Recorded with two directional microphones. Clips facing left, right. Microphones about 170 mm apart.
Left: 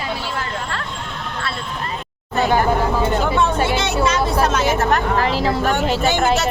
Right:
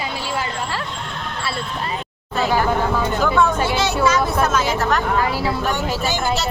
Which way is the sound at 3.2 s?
30° left (ahead or behind).